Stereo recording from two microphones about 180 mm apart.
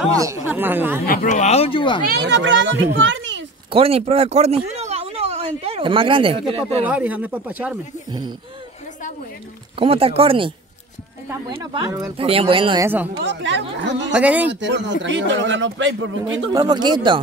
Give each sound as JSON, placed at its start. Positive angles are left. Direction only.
{"t": 0.1, "sound": "speech", "side_deg": -15}
{"t": 1.0, "sound": "speech", "side_deg": 50}
{"t": 2.0, "sound": "a child's voice", "side_deg": -70}
{"t": 3.7, "sound": "speech", "side_deg": -35}
{"t": 6.9, "sound": "speech", "side_deg": -10}
{"t": 8.1, "sound": "speech", "side_deg": -25}
{"t": 9.8, "sound": "speech", "side_deg": -30}
{"t": 12.2, "sound": "speech", "side_deg": -30}
{"t": 12.8, "sound": "speech", "side_deg": -10}
{"t": 13.2, "sound": "speech", "side_deg": -75}
{"t": 14.1, "sound": "speech", "side_deg": -10}
{"t": 14.5, "sound": "speech", "side_deg": -80}
{"t": 16.5, "sound": "speech", "side_deg": -25}